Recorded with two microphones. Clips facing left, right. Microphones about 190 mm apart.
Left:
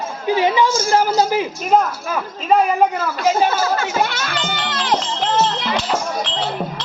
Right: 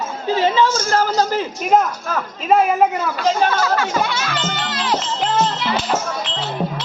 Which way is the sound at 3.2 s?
10° left (ahead or behind).